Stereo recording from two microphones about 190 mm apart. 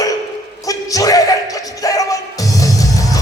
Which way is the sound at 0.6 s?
20° left (ahead or behind).